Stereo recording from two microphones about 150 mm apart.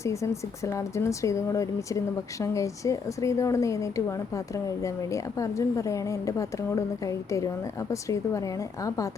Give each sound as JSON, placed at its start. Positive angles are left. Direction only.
{"t": 0.0, "sound": "a woman's voice", "side_deg": 20}